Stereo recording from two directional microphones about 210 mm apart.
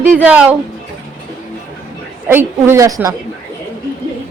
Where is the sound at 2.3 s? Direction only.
10° right (ahead or behind).